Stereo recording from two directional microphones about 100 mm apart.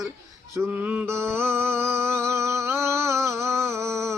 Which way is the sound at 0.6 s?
15° right (ahead or behind).